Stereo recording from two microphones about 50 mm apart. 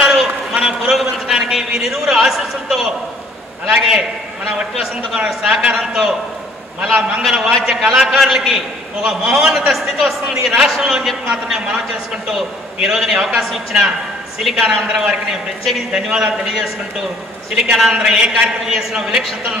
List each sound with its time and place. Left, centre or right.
0.1 s a sound: centre
1.0 s a man's voice: centre
5.1 s a man's voice: centre
7.2 s a man's voice: centre